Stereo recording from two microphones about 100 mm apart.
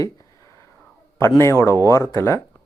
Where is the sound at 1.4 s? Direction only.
30° left (ahead or behind).